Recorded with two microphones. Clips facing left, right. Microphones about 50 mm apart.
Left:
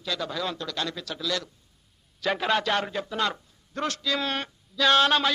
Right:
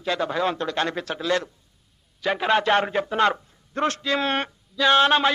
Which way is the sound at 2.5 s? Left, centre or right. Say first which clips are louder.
Right 8 dB; right.